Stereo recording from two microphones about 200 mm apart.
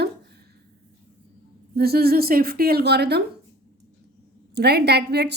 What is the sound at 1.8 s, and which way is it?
Speech, 50° right (ahead or behind).